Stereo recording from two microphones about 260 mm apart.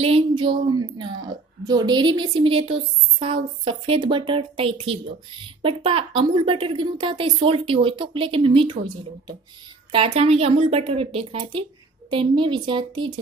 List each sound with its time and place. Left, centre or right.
0.0 s a woman's voice: right